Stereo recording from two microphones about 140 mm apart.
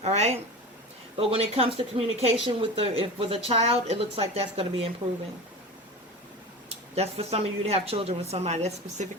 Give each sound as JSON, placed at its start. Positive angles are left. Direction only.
{"t": 0.0, "sound": "a woman's voice", "side_deg": -50}
{"t": 6.7, "sound": "a woman's voice", "side_deg": -45}